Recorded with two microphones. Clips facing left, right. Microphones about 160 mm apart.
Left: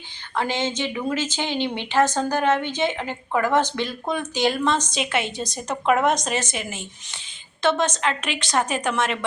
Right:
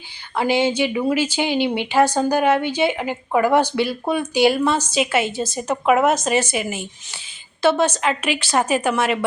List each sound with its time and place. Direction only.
0.3 s a woman's voice: 10° right (ahead or behind)